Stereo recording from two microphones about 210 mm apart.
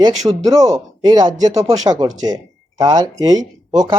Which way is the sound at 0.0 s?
20° right (ahead or behind).